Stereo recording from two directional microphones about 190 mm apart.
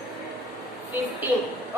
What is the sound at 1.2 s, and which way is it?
Speech, 10° right (ahead or behind).